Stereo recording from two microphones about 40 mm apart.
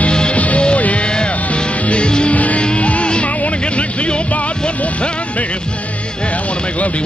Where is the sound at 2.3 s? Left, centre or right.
Left.